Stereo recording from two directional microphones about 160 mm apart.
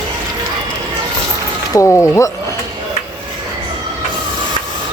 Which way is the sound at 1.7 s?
20° left (ahead or behind).